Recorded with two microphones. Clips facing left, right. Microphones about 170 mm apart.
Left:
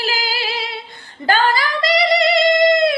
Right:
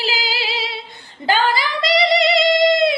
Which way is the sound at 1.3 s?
50° left (ahead or behind).